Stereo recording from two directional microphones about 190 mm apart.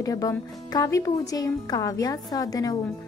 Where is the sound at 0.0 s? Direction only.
15° left (ahead or behind).